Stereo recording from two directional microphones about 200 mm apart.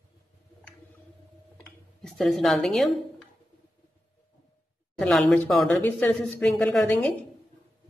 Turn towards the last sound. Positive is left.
turn(degrees=5)  # may be behind; listen again after turning